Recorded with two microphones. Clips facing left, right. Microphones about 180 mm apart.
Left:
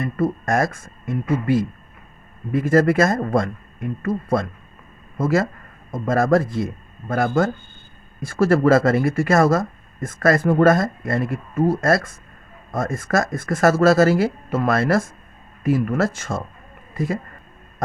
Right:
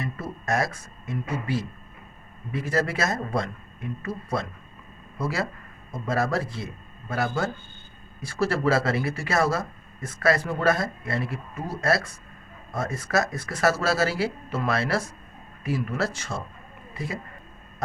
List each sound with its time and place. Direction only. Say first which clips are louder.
0.0 s speech: left 11 dB; 50° left (ahead or behind)